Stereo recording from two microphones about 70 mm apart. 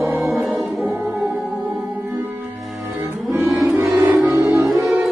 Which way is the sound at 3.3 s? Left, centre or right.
Right.